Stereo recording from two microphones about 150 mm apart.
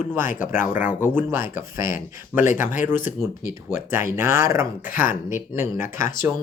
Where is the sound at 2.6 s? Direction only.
60° left (ahead or behind).